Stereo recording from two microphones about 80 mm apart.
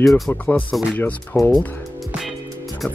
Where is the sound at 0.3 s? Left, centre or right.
Centre.